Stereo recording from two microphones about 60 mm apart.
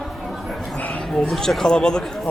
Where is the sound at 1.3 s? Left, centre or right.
Centre.